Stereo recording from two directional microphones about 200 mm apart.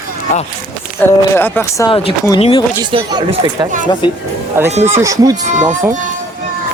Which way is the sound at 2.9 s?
20° right (ahead or behind).